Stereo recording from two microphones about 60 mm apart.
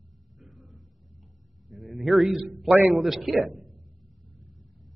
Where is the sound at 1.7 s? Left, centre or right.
Centre.